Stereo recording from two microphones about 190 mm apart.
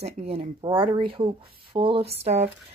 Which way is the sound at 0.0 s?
30° right (ahead or behind).